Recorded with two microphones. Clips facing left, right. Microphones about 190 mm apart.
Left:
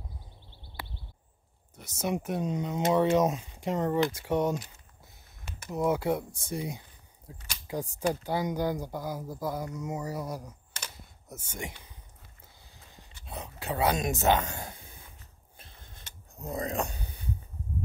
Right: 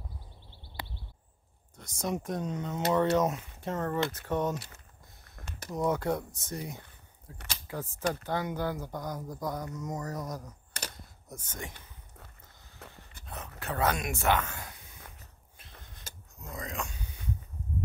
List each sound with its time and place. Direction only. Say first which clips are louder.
1.8 s speech: left 2 dB; 5° left (ahead or behind)
4.7 s a sound: even; 70° right (ahead or behind)
5.8 s speech: left 2 dB; 5° left (ahead or behind)
12.8 s dog: right 10 dB; 70° right (ahead or behind)
13.3 s dog: left 3 dB; 15° left (ahead or behind)
13.9 s speech: left 3 dB; 20° left (ahead or behind)
16.3 s speech: left 7 dB; 35° left (ahead or behind)